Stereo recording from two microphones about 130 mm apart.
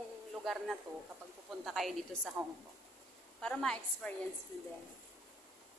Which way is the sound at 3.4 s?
5° left (ahead or behind).